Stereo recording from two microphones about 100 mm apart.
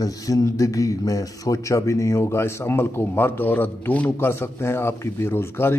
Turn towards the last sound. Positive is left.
turn(degrees=25)  # may be behind; listen again after turning